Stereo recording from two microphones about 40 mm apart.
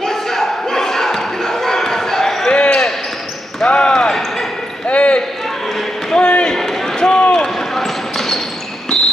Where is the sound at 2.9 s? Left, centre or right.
Centre.